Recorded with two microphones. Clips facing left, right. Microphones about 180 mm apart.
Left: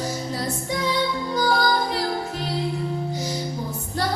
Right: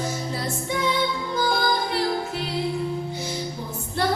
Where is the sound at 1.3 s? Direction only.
40° left (ahead or behind).